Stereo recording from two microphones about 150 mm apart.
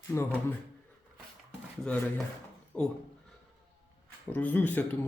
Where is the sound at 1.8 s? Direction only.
5° left (ahead or behind).